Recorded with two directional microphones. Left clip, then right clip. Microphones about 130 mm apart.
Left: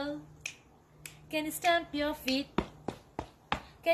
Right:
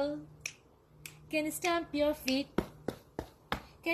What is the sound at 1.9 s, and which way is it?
Speech, 15° left (ahead or behind).